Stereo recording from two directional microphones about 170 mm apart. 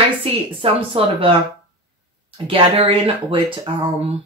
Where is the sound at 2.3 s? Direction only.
30° right (ahead or behind).